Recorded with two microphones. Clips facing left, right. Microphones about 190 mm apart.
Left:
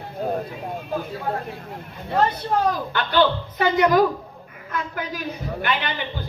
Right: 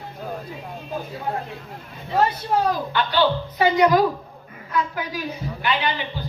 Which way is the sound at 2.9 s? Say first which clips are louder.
Left 1 dB; 50° left (ahead or behind).